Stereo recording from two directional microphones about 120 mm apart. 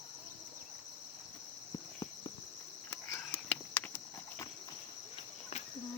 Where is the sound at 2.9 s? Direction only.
20° left (ahead or behind).